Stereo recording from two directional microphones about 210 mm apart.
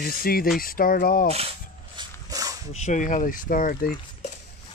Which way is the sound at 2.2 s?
15° right (ahead or behind).